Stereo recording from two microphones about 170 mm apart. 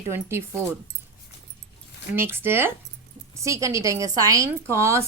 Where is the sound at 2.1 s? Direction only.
15° right (ahead or behind).